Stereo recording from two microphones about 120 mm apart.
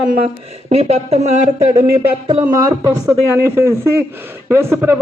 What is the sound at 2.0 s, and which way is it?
Speech, 45° right (ahead or behind).